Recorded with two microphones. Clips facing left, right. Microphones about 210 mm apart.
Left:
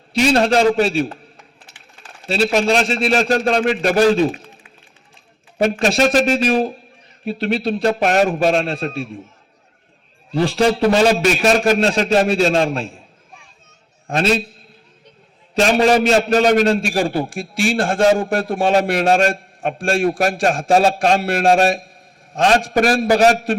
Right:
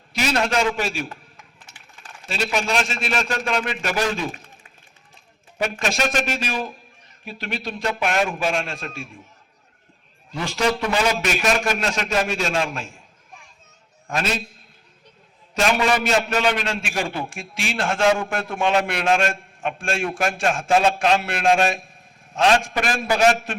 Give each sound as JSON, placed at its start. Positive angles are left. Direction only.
{"t": 0.2, "sound": "a man's voice", "side_deg": 30}
{"t": 2.2, "sound": "a man's voice", "side_deg": 35}
{"t": 5.8, "sound": "a man's voice", "side_deg": 35}
{"t": 10.3, "sound": "a man's voice", "side_deg": 35}
{"t": 14.1, "sound": "a man's voice", "side_deg": 35}
{"t": 15.5, "sound": "a man's voice", "side_deg": 35}